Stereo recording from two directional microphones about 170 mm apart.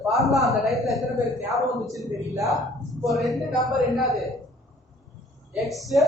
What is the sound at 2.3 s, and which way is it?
Speech, 20° right (ahead or behind).